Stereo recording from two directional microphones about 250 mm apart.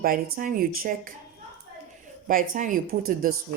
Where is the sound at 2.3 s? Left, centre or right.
Right.